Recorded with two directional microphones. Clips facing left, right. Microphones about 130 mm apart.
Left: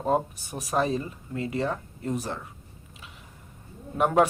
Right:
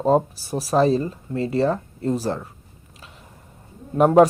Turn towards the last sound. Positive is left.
turn(degrees=-35)  # may be behind; listen again after turning